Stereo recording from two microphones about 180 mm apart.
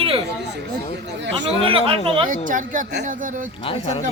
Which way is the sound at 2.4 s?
45° right (ahead or behind).